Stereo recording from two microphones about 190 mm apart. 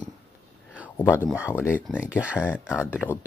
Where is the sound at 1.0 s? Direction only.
10° right (ahead or behind).